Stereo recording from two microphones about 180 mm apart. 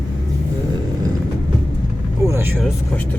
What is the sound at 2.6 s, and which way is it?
Speech, 10° left (ahead or behind).